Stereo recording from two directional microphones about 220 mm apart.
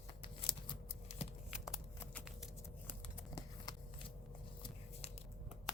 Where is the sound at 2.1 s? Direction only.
5° left (ahead or behind).